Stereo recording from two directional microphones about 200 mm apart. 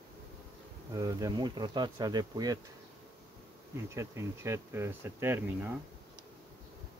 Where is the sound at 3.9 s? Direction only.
15° right (ahead or behind).